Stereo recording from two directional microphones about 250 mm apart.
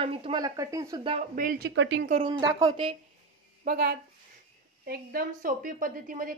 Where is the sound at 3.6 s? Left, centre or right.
Right.